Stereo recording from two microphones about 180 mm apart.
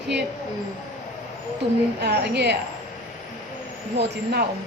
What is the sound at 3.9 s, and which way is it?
Speech, 65° right (ahead or behind).